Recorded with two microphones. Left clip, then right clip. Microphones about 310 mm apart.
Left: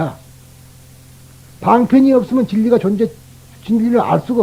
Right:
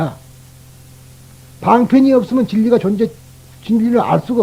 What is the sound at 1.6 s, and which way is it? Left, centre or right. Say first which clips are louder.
A man's voice: even; left.